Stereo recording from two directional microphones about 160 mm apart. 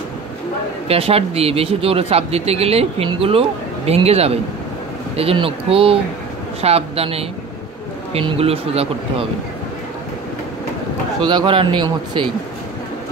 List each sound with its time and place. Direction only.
0.8 s speech: 40° right (ahead or behind)
11.1 s speech: 30° right (ahead or behind)